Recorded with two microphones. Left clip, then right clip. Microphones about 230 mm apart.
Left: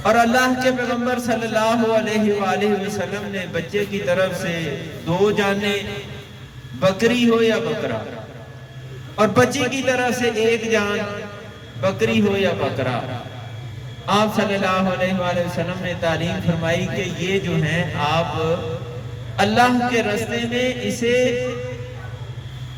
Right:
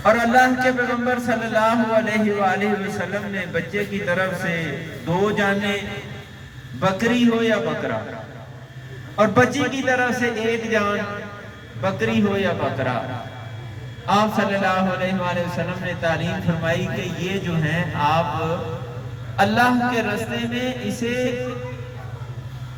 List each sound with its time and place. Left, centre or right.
0.0 s a man's voice: left
9.1 s a man's voice: left
14.1 s a man's voice: left